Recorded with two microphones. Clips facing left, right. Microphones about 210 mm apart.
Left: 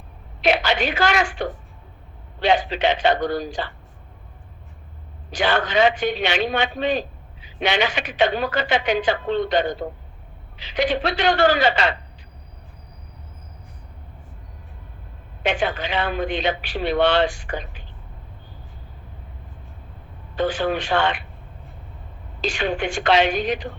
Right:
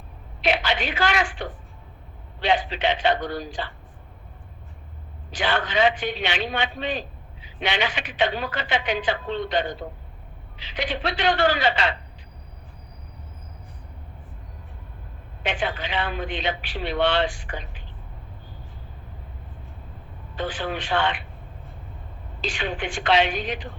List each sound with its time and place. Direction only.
0.4 s a man's voice: 45° left (ahead or behind)
5.3 s a man's voice: 45° left (ahead or behind)
15.4 s a man's voice: 45° left (ahead or behind)
20.3 s a man's voice: 45° left (ahead or behind)
22.4 s a man's voice: 45° left (ahead or behind)